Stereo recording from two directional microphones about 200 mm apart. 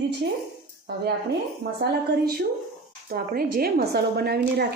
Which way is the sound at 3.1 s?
50° right (ahead or behind).